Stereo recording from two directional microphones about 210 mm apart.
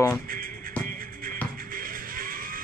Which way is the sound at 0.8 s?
45° right (ahead or behind).